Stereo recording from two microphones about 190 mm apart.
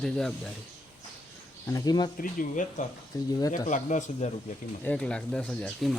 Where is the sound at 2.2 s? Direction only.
45° left (ahead or behind).